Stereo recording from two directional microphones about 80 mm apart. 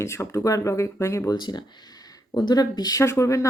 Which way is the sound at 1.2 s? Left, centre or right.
Left.